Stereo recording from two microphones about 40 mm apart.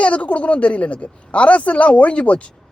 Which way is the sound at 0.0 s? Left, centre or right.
Left.